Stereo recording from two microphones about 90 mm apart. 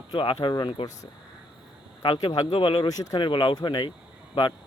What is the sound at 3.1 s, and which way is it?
Speech, 60° left (ahead or behind).